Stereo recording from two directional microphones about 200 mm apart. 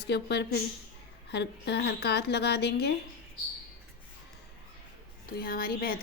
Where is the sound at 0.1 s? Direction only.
55° left (ahead or behind).